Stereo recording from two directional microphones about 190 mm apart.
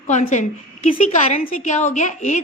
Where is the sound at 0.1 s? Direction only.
40° left (ahead or behind).